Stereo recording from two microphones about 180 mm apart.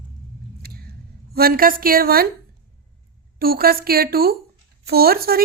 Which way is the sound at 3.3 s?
55° right (ahead or behind).